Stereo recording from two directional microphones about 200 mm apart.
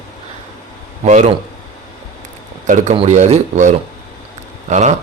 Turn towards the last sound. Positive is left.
turn(degrees=-35)  # may be behind; listen again after turning